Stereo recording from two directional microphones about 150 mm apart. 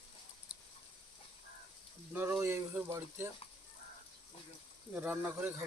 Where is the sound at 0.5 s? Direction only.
5° right (ahead or behind).